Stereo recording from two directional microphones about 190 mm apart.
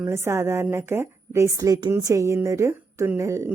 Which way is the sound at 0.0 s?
15° right (ahead or behind).